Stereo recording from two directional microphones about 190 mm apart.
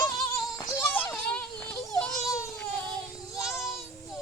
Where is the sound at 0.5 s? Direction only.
15° left (ahead or behind).